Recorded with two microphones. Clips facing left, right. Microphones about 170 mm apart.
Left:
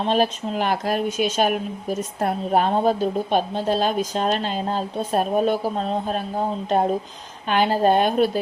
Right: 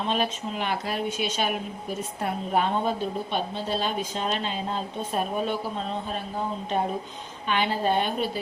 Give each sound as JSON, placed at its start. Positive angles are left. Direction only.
{"t": 0.0, "sound": "a woman's voice", "side_deg": 35}